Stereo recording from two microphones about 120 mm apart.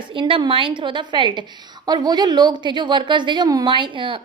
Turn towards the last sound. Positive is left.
turn(degrees=-45)  # may be behind; listen again after turning